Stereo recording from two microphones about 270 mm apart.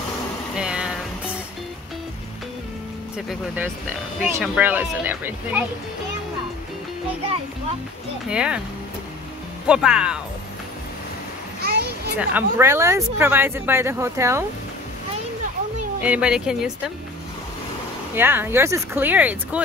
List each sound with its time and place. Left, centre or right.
0.6 s vehicle: centre
3.3 s speech: centre
8.3 s speech: centre
9.7 s speech: centre
11.6 s children playing: right
12.2 s speech: centre
16.0 s speech: centre
18.1 s speech: centre